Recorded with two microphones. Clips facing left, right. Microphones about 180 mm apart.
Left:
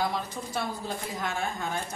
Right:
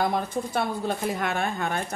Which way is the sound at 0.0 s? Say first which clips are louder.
Right 5 dB; 55° right (ahead or behind).